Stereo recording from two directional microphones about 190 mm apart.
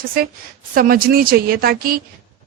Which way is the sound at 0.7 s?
50° right (ahead or behind).